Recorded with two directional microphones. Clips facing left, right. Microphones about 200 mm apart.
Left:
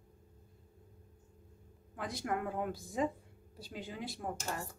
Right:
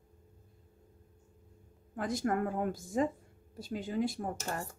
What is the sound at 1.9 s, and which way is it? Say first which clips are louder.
A woman's voice: right 5 dB; 45° right (ahead or behind).